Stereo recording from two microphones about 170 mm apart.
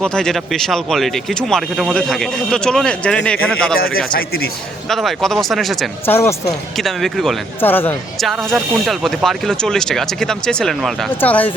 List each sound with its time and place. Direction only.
0.0 s speech: 5° left (ahead or behind)
3.8 s speech: 60° left (ahead or behind)
4.9 s speech: centre (ahead or behind)
6.1 s speech: 15° left (ahead or behind)
6.7 s speech: centre (ahead or behind)
7.6 s speech: 10° left (ahead or behind)
8.2 s speech: centre (ahead or behind)